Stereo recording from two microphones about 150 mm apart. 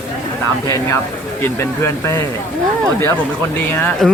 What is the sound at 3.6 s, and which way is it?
Speech, 15° left (ahead or behind).